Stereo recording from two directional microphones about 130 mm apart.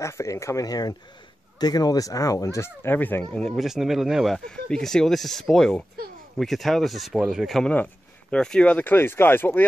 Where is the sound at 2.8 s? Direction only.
15° left (ahead or behind).